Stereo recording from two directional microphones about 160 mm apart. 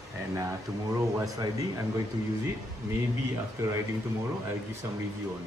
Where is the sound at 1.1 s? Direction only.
20° right (ahead or behind).